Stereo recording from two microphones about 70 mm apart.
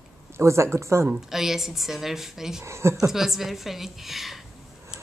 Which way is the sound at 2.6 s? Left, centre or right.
Right.